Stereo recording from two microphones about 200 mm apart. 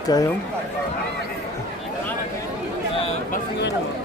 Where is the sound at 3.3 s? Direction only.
60° left (ahead or behind).